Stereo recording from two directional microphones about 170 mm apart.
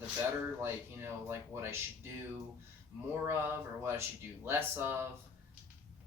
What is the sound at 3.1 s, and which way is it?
Speech, 15° right (ahead or behind).